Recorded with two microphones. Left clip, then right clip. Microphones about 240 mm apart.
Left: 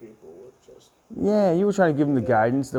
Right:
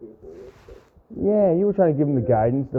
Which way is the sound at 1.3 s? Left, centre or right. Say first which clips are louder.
Right 2 dB; left.